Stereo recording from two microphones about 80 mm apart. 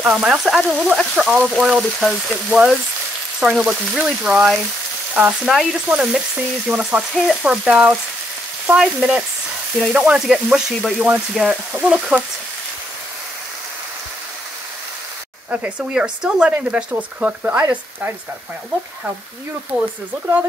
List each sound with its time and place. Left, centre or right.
0.0 s speech: centre
5.4 s frying: centre
5.9 s speech: centre
7.2 s frying: centre
9.8 s speech: centre
15.5 s speech: centre
19.7 s speech: centre